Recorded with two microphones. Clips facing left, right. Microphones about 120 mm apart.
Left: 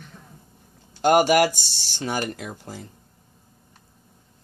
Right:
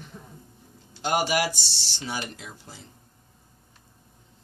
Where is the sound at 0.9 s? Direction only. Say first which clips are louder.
Left 8 dB; 50° left (ahead or behind).